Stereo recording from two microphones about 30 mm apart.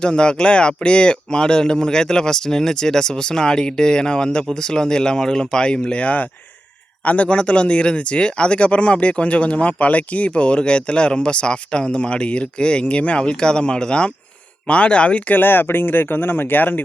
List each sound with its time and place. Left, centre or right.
0.0 s speech: left
7.0 s speech: left
7.3 s speech: left
14.7 s speech: left
16.5 s speech: left